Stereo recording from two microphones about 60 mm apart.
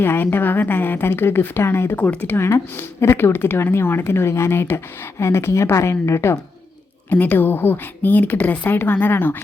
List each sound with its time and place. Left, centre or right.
0.0 s speech: left
2.0 s a woman's voice: left
7.1 s speech: left